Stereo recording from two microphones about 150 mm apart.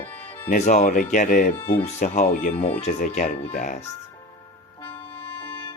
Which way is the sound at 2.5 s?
40° left (ahead or behind).